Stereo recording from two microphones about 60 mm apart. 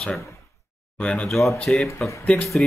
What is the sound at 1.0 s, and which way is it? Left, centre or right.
Speech, left.